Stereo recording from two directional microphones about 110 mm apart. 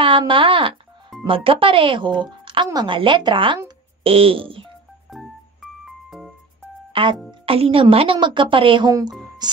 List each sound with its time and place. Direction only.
0.3 s speech: 50° right (ahead or behind)
5.1 s music: centre (ahead or behind)
6.9 s music: 50° right (ahead or behind)
7.2 s speech: 60° right (ahead or behind)
9.4 s music: 40° right (ahead or behind)